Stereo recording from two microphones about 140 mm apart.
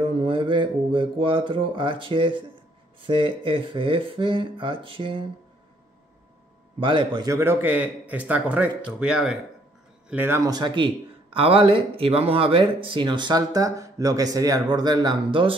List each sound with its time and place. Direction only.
0.1 s a man's voice: 40° right (ahead or behind)
6.8 s a man's voice: 35° right (ahead or behind)
7.2 s a man's voice: 15° right (ahead or behind); by 15.5 s 35° right (ahead or behind)